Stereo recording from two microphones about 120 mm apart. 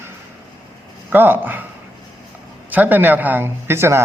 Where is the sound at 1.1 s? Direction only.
15° right (ahead or behind).